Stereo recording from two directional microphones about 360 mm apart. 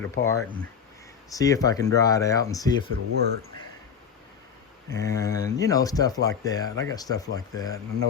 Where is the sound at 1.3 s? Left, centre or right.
Centre.